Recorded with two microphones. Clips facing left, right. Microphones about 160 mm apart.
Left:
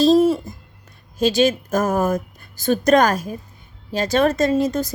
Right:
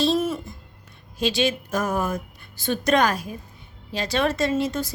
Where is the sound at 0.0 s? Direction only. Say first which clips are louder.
Left 8 dB; 35° left (ahead or behind).